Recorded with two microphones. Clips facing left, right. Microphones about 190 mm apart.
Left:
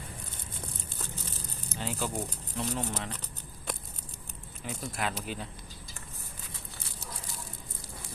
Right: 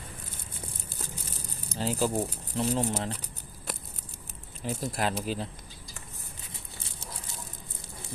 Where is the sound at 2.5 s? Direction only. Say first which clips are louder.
Right 6 dB; 35° right (ahead or behind).